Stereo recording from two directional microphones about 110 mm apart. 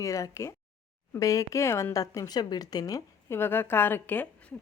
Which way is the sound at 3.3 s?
20° left (ahead or behind).